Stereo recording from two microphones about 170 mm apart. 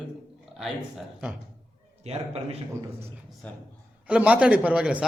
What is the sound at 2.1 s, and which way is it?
Speech, 40° right (ahead or behind).